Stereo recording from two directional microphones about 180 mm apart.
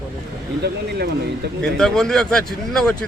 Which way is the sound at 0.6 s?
65° right (ahead or behind).